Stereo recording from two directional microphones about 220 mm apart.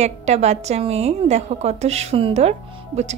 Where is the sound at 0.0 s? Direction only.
30° right (ahead or behind).